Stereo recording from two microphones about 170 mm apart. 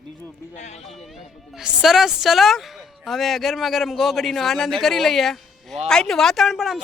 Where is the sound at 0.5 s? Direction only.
45° left (ahead or behind).